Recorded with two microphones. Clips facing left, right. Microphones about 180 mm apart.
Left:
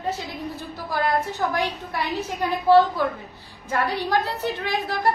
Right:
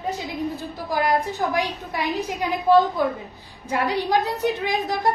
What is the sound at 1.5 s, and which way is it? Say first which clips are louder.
A woman's voice: right 1 dB; 15° right (ahead or behind).